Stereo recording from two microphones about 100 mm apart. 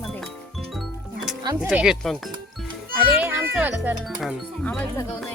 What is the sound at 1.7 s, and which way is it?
Speech, 10° right (ahead or behind).